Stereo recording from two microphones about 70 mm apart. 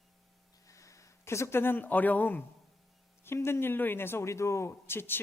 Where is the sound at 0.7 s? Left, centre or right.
Left.